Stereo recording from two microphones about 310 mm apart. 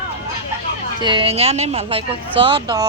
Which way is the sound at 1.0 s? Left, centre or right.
Centre.